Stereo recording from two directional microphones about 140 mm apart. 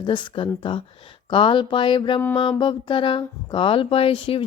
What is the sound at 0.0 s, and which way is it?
Speech, 35° left (ahead or behind).